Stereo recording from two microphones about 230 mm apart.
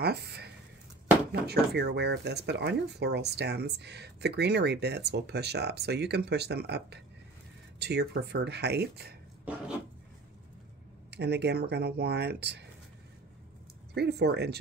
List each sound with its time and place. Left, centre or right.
0.0 s speech: right
11.1 s speech: right
13.9 s speech: right